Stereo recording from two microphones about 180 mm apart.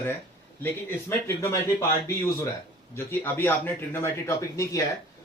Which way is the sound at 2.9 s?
15° left (ahead or behind).